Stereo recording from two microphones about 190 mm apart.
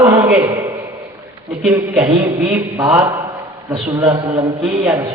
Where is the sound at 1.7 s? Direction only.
15° right (ahead or behind).